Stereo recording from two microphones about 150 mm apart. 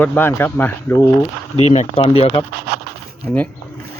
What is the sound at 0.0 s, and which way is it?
Speech, 15° left (ahead or behind).